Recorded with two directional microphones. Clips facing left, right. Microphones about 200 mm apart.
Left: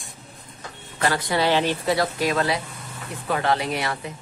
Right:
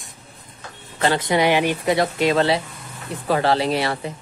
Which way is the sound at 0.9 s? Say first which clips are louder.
Right 4 dB; 25° right (ahead or behind).